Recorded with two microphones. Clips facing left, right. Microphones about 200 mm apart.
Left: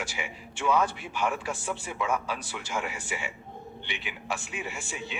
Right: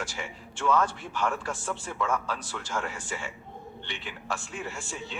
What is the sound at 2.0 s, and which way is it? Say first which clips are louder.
Speech: even; 15° left (ahead or behind).